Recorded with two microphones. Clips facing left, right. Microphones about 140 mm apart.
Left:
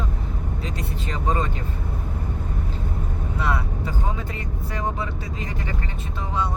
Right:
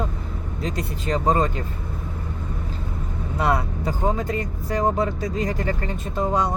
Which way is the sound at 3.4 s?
40° right (ahead or behind).